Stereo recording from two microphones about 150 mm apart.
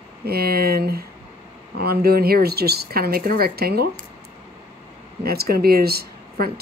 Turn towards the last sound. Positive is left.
turn(degrees=-90)